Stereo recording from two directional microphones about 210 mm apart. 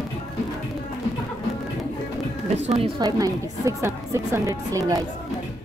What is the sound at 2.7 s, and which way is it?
Speech, 25° right (ahead or behind).